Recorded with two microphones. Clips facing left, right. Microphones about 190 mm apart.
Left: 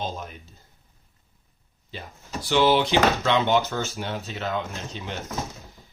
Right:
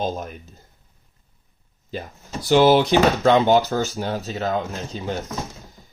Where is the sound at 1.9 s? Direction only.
45° right (ahead or behind).